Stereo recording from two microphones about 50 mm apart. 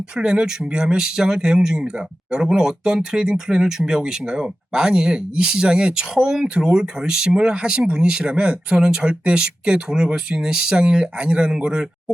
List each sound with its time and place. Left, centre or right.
0.2 s speech: centre